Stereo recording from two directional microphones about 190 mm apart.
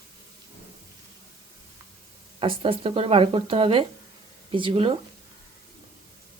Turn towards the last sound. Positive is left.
turn(degrees=-30)  # may be behind; listen again after turning